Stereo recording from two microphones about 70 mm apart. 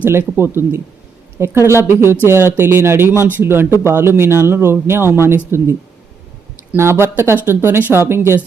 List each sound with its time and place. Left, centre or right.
0.0 s speech: right
6.7 s speech: right